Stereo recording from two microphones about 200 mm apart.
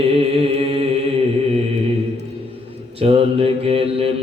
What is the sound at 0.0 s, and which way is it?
Music, 30° right (ahead or behind).